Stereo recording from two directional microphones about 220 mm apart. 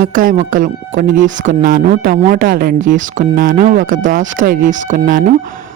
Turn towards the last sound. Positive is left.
turn(degrees=-35)  # may be behind; listen again after turning